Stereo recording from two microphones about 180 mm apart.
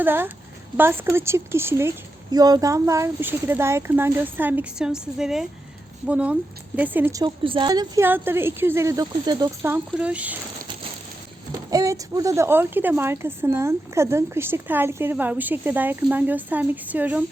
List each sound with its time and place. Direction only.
0.0 s a woman's voice: 10° right (ahead or behind)
9.7 s a woman's voice: 5° right (ahead or behind)
11.7 s a woman's voice: 20° right (ahead or behind)